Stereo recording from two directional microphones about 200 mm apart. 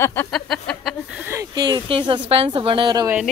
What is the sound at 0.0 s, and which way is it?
Speech, 10° left (ahead or behind).